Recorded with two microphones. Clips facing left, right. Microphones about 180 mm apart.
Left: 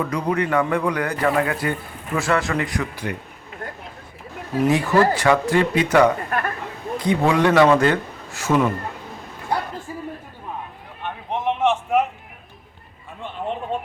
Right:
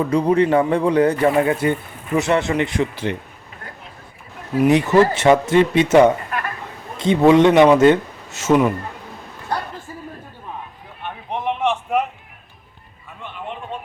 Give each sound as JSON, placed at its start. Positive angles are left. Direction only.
{"t": 0.0, "sound": "speech", "side_deg": -30}
{"t": 4.7, "sound": "speech", "side_deg": -20}
{"t": 11.3, "sound": "a sound", "side_deg": 5}